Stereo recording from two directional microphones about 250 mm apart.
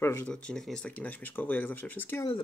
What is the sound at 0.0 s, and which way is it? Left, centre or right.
Speech, centre.